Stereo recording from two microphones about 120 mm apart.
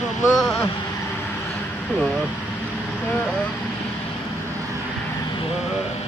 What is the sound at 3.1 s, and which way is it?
Speech, 10° left (ahead or behind).